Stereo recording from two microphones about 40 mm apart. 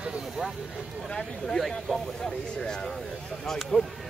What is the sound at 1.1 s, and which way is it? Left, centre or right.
Speech, centre.